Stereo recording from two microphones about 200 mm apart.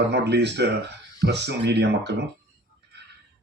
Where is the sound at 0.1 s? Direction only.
60° right (ahead or behind).